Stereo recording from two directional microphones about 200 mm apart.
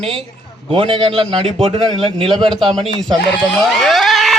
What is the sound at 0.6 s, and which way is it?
A man's voice, 25° right (ahead or behind).